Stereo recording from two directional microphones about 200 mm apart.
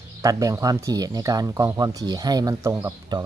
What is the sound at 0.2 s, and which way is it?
Speech, 15° right (ahead or behind).